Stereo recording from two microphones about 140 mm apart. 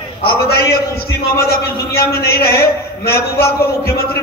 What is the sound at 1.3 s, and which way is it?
A man's voice, 90° left.